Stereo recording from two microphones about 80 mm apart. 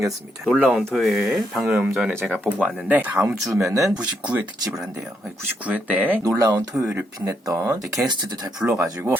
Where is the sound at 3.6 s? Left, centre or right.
Right.